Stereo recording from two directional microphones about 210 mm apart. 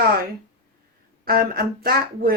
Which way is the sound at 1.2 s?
45° right (ahead or behind).